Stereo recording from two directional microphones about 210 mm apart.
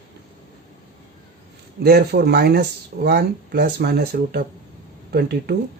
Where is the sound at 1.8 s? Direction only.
50° right (ahead or behind).